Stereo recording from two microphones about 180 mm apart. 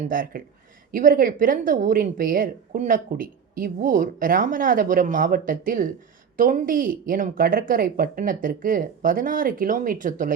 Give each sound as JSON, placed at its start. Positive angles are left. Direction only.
{"t": 0.1, "sound": "a woman's voice", "side_deg": -50}